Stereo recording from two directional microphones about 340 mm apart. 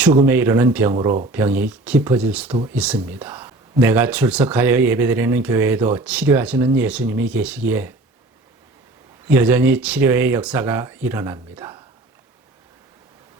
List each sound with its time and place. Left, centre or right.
0.3 s speech: centre
9.2 s speech: centre